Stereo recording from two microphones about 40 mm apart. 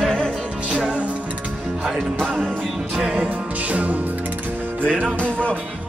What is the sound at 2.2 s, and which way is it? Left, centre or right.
Music, centre.